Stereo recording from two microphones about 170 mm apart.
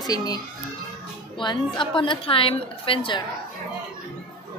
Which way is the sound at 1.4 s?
30° left (ahead or behind).